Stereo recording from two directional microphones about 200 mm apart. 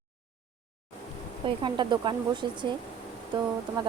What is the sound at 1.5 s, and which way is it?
Speech, 25° right (ahead or behind).